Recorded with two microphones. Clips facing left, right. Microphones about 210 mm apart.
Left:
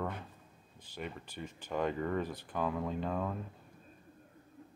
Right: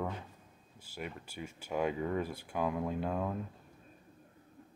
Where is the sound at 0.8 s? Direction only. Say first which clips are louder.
Even; 10° right (ahead or behind).